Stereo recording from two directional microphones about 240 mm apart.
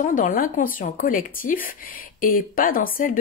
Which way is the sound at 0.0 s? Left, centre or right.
Left.